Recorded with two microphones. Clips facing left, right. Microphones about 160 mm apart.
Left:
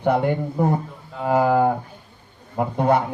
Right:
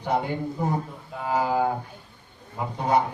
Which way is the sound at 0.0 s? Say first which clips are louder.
Left 6 dB; 55° left (ahead or behind).